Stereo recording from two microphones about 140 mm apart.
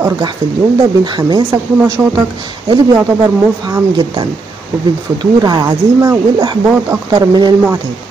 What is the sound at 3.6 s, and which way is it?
Speech, 30° right (ahead or behind).